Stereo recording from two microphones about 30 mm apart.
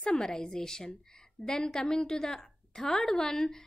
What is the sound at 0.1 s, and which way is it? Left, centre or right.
A woman's voice, left.